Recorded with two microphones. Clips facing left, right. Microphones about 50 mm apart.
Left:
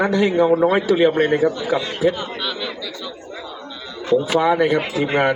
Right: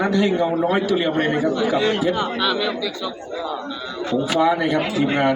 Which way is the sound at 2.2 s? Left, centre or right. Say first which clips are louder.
Right 5 dB; right.